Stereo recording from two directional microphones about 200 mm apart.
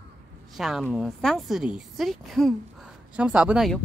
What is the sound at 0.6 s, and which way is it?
A woman's voice, centre (ahead or behind).